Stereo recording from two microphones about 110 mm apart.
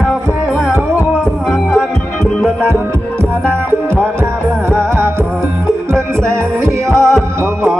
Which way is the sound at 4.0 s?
25° right (ahead or behind).